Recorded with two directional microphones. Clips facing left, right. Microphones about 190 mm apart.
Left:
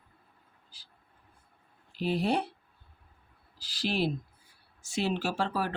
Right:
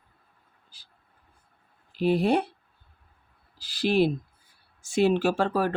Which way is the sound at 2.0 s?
55° right (ahead or behind).